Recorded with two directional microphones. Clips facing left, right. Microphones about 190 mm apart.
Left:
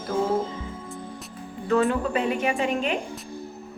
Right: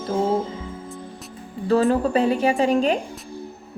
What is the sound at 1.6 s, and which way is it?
A woman's voice, 35° right (ahead or behind).